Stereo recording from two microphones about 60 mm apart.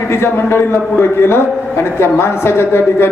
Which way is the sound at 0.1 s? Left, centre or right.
Left.